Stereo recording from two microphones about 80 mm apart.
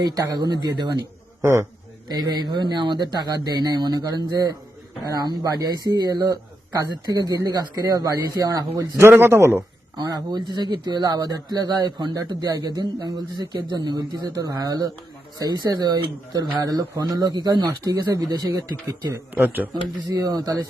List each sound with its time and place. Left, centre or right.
0.0 s speech: right
1.4 s a man's voice: right
2.0 s speech: right
8.7 s speech: right
10.0 s speech: right
17.9 s speech: right
19.3 s speech: right
20.1 s speech: right